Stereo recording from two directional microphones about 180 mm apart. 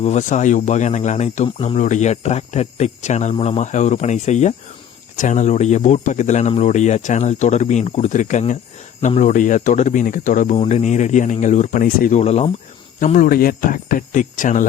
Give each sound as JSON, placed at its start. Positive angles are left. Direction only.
{"t": 0.0, "sound": "speech", "side_deg": 40}
{"t": 12.2, "sound": "speech", "side_deg": 35}
{"t": 13.0, "sound": "speech", "side_deg": 45}